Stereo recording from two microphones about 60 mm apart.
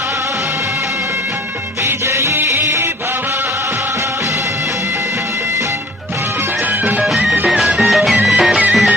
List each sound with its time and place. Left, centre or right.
2.1 s music: right
7.9 s music: centre